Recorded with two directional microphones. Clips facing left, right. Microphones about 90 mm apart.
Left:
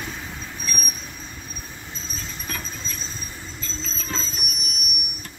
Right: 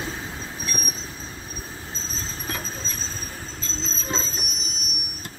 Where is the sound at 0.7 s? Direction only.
25° right (ahead or behind).